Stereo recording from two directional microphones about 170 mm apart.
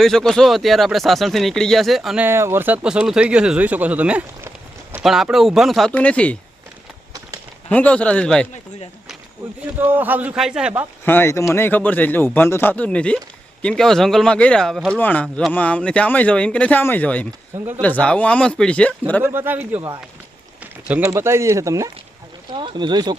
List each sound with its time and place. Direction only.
0.0 s speech: centre (ahead or behind)
7.7 s speech: 10° left (ahead or behind)
9.7 s speech: 10° right (ahead or behind)
11.0 s speech: 10° left (ahead or behind)
19.2 s speech: 15° right (ahead or behind)